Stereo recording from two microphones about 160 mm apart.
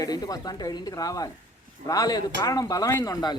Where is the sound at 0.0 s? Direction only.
25° left (ahead or behind).